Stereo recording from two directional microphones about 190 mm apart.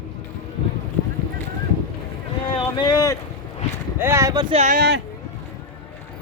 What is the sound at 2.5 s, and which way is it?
Speech, 20° left (ahead or behind).